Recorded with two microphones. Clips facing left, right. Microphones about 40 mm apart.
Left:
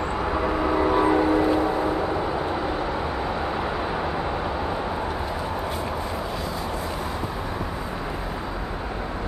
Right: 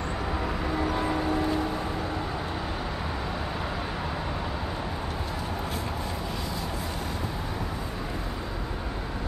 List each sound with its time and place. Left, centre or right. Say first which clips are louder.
0.3 s train: left 8 dB; left